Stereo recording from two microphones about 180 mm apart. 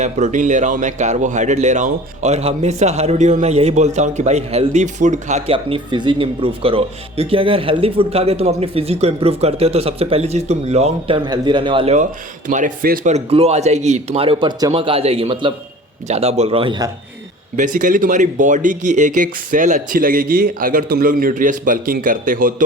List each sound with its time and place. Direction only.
0.0 s speech: 40° right (ahead or behind)
11.3 s a man's voice: 25° right (ahead or behind)
12.5 s speech: 45° right (ahead or behind); by 16.9 s 25° right (ahead or behind)
17.6 s speech: 45° right (ahead or behind)